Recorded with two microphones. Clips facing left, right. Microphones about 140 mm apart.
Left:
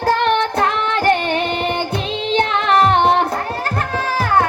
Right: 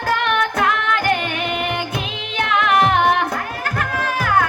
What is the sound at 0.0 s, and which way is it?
Female singing, 30° left (ahead or behind).